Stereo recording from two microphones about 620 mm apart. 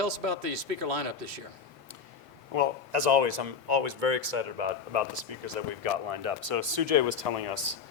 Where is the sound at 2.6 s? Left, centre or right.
Right.